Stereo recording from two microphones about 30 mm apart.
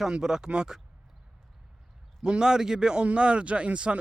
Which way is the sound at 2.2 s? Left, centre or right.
Right.